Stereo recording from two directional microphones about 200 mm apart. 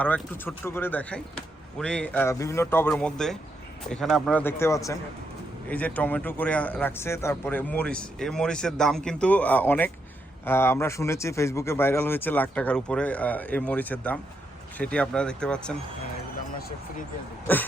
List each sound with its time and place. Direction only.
0.0 s a man's voice: 10° left (ahead or behind)
17.5 s a man's voice: 10° left (ahead or behind)